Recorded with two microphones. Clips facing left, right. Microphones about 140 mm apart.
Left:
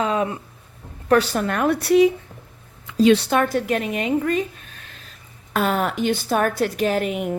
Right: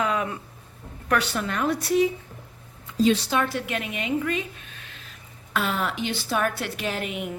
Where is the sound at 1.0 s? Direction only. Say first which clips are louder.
Left 7 dB; 35° left (ahead or behind).